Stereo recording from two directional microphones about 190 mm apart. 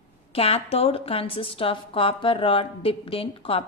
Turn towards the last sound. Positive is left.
turn(degrees=30)  # may be behind; listen again after turning